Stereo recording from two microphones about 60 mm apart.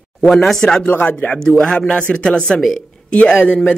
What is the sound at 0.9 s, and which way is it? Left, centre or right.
Speech, left.